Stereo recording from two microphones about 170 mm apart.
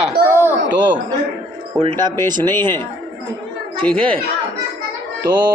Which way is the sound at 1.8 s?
30° right (ahead or behind).